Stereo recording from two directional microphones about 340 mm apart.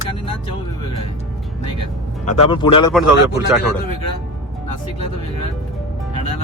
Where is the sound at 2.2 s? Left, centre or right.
Centre.